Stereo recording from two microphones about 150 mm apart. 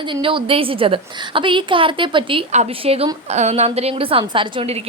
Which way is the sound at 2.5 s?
45° right (ahead or behind).